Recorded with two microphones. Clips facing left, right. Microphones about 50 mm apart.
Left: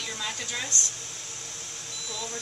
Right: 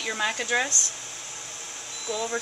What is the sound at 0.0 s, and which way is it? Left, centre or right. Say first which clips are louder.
Speech: right 7 dB; right.